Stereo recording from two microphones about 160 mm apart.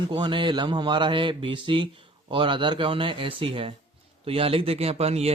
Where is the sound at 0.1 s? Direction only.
30° right (ahead or behind).